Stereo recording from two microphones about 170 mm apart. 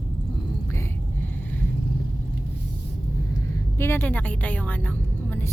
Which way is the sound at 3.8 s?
15° left (ahead or behind).